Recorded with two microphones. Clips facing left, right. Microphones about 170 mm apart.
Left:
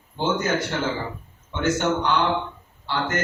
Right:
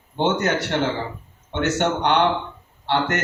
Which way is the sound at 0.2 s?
70° right (ahead or behind).